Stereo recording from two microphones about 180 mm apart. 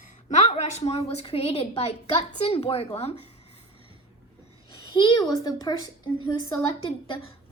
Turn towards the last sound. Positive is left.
turn(degrees=25)  # may be behind; listen again after turning